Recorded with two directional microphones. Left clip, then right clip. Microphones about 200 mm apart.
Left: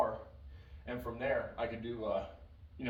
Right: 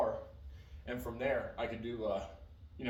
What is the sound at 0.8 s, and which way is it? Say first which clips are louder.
Speech: even; 15° right (ahead or behind).